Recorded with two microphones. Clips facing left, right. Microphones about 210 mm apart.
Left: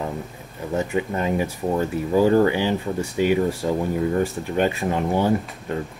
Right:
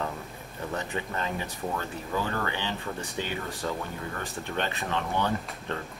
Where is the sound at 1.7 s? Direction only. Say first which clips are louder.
Left 12 dB; 30° left (ahead or behind).